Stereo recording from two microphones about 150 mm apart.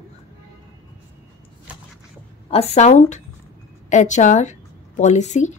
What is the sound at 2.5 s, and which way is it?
A woman's voice, 45° left (ahead or behind).